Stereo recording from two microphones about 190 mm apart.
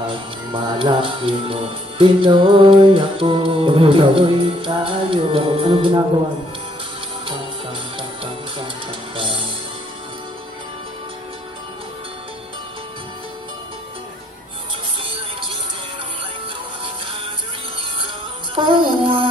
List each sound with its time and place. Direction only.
0.1 s speech: 25° right (ahead or behind)
9.1 s music: 25° right (ahead or behind)
18.5 s music: 25° right (ahead or behind)